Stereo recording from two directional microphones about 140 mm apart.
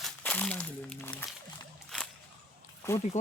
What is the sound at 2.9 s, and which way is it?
Speech, 20° left (ahead or behind).